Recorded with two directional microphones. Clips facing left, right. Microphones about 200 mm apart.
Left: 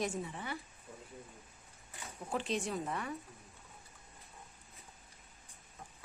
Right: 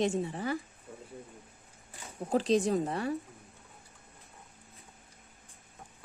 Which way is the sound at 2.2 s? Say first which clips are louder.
Right 10 dB; 35° right (ahead or behind).